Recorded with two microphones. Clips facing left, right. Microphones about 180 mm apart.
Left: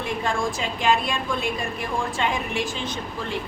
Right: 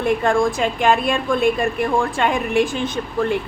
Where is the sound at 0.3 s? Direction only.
55° right (ahead or behind).